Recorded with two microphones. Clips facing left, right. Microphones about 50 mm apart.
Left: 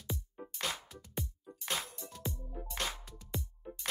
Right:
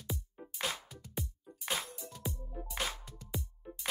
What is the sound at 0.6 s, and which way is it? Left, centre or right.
Music, centre.